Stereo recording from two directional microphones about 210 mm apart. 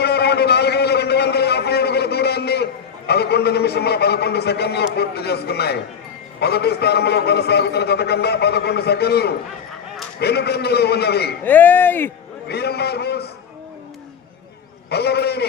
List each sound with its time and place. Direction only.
0.0 s a sound: 50° left (ahead or behind)
3.1 s a man's voice: 50° left (ahead or behind)
11.4 s speech: 10° left (ahead or behind)
12.5 s a man's voice: 50° left (ahead or behind)
14.8 s a man's voice: 50° left (ahead or behind)